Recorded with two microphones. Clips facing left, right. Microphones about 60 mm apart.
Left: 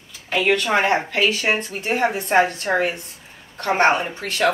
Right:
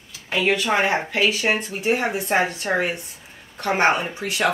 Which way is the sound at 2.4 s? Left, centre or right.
Centre.